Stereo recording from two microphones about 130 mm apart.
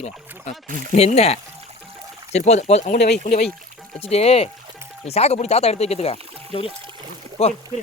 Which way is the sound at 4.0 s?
55° left (ahead or behind).